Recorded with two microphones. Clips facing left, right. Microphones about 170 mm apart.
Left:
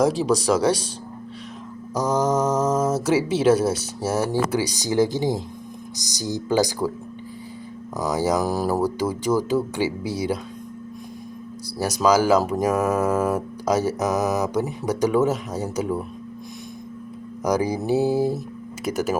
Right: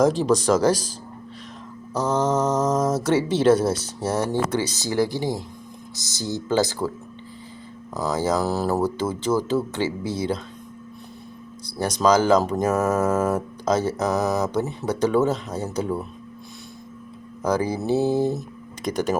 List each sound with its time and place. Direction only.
0.0 s speech: 5° left (ahead or behind)
1.9 s speech: 10° left (ahead or behind)
7.9 s speech: 15° left (ahead or behind)
11.6 s speech: 10° left (ahead or behind)
17.4 s speech: 15° left (ahead or behind)